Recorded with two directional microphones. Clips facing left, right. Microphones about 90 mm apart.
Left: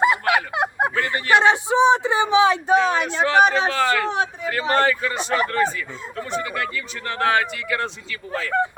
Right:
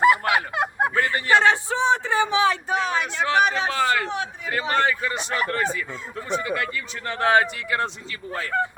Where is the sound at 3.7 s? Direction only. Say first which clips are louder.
Left 2 dB; 10° right (ahead or behind).